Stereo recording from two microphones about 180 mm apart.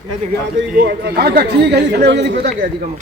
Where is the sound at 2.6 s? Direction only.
50° right (ahead or behind).